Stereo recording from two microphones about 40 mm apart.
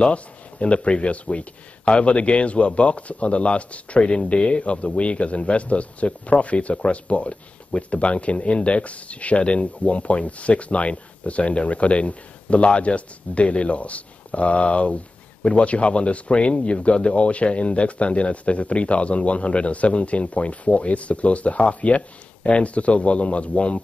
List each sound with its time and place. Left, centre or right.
0.0 s speech: left